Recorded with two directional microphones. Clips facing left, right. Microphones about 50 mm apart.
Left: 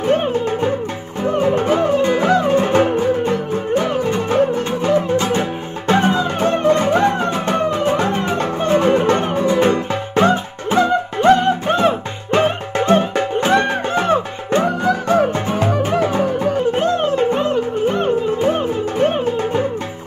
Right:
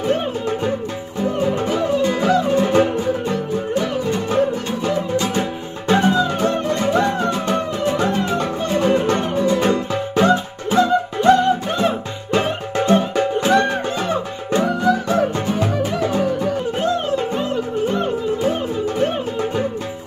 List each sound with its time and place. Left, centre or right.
0.0 s music: left